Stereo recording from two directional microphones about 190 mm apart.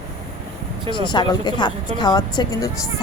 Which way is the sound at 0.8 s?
25° left (ahead or behind).